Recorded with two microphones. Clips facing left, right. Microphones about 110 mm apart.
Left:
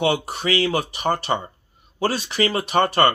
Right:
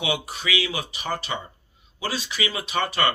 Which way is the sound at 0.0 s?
50° left (ahead or behind).